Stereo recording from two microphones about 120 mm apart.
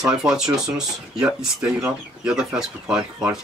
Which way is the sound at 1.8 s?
5° right (ahead or behind).